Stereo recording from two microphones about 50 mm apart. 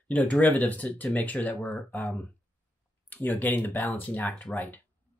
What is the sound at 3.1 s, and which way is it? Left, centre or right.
Speech, left.